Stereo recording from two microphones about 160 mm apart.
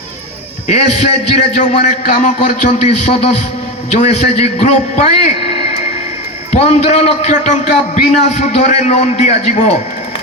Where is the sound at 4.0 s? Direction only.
40° left (ahead or behind).